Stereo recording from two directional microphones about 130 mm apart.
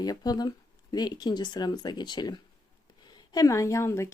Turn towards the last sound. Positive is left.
turn(degrees=20)  # may be behind; listen again after turning